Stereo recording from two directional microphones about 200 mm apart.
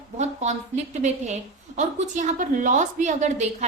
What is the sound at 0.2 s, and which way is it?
Speech, 35° right (ahead or behind).